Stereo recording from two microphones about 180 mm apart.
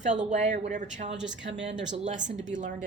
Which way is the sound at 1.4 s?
85° right.